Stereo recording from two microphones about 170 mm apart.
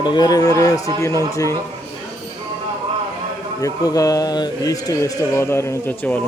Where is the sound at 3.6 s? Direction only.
20° left (ahead or behind).